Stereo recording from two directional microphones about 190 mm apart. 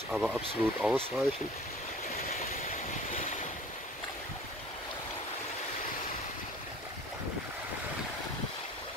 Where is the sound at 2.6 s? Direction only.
40° left (ahead or behind).